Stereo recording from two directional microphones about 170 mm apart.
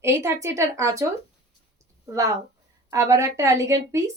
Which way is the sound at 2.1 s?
20° right (ahead or behind).